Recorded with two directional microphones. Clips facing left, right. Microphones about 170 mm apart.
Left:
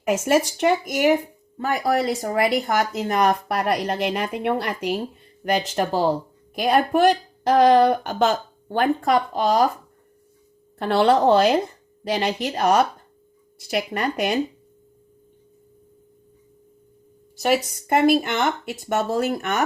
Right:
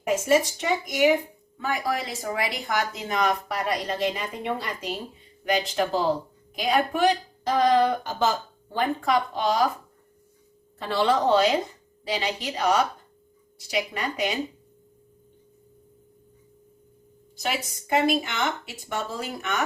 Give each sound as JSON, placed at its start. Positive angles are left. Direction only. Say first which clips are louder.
{"t": 0.1, "sound": "speech", "louder": "left 2 dB", "side_deg": 65}
{"t": 1.5, "sound": "speech", "louder": "left 6 dB", "side_deg": 45}
{"t": 5.7, "sound": "a woman's voice", "louder": "left 3 dB", "side_deg": 45}
{"t": 9.0, "sound": "a woman's voice", "louder": "left 4 dB", "side_deg": 45}
{"t": 10.8, "sound": "a woman's voice", "louder": "left 6 dB", "side_deg": 60}
{"t": 17.4, "sound": "speech", "louder": "left 9 dB", "side_deg": 55}